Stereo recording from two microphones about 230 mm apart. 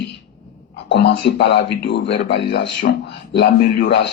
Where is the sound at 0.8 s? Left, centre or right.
Left.